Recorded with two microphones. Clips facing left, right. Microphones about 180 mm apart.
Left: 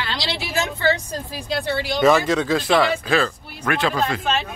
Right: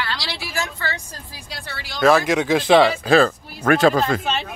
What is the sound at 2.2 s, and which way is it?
A man's voice, 15° right (ahead or behind).